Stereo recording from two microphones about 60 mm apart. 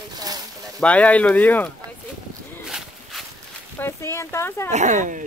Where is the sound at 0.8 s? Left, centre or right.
Left.